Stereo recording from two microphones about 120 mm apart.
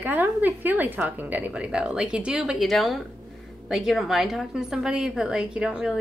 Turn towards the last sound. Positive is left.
turn(degrees=-5)  # may be behind; listen again after turning